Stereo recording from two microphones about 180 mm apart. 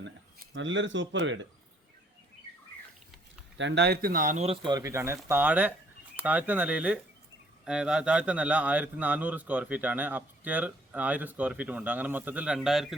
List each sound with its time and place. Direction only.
0.5 s speech: 90° right
3.6 s speech: 75° right (ahead or behind); by 13.0 s centre (ahead or behind)